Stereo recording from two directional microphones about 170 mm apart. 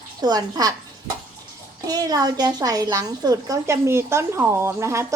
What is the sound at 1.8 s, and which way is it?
A woman's voice, 20° right (ahead or behind).